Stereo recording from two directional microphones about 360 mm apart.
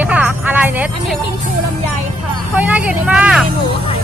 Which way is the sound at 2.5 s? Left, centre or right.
Centre.